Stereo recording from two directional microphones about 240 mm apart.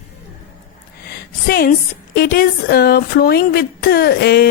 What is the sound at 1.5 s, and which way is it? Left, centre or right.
Speech, left.